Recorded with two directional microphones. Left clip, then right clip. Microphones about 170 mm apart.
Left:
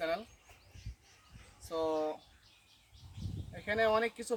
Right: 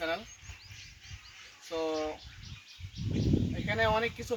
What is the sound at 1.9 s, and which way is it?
Speech, 5° left (ahead or behind).